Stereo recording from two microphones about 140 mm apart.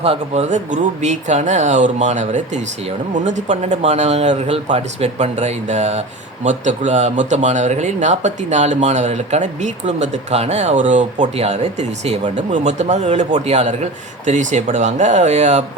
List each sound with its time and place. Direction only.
0.0 s speech: 40° right (ahead or behind)
0.5 s speech: 60° right (ahead or behind)